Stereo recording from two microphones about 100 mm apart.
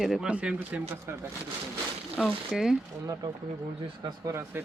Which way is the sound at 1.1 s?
25° right (ahead or behind).